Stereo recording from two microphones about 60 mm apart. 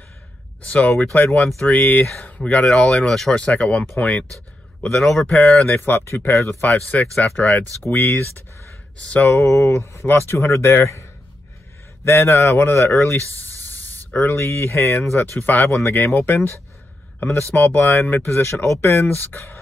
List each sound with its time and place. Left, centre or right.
0.7 s speech: left
2.7 s speech: centre
3.3 s speech: left
5.8 s speech: left
6.6 s speech: left
8.9 s speech: left
9.3 s speech: left
14.3 s speech: left
18.2 s speech: left